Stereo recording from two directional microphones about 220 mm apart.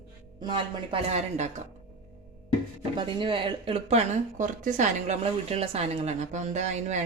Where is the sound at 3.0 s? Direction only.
20° right (ahead or behind).